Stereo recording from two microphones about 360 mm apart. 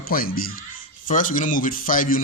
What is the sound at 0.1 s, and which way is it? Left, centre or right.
A man's voice, left.